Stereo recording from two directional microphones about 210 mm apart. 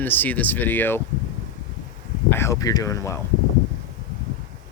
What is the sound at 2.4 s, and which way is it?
Speech, 15° left (ahead or behind).